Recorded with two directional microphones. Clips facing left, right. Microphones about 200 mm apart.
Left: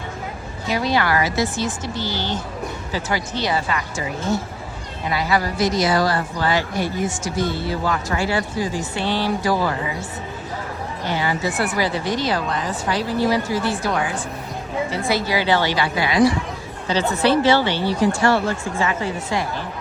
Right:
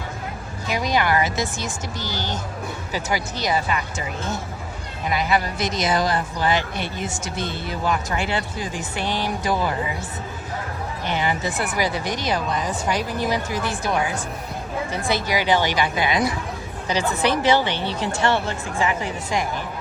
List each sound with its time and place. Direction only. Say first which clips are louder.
0.7 s speech: left 1 dB; 15° right (ahead or behind)
5.1 s a woman's voice: left 1 dB; 20° right (ahead or behind)
11.0 s speech: left 2 dB; 20° right (ahead or behind)
15.1 s speech: left 1 dB; 15° right (ahead or behind)